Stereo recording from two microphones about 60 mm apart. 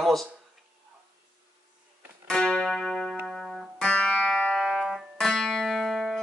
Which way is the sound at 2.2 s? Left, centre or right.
Centre.